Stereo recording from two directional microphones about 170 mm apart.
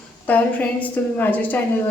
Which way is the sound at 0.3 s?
10° left (ahead or behind).